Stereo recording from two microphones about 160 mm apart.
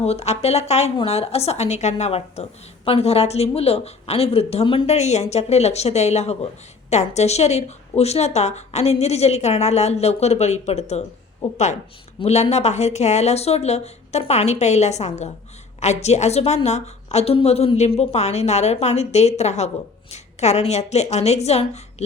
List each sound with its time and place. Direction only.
0.0 s a woman's voice: 40° left (ahead or behind)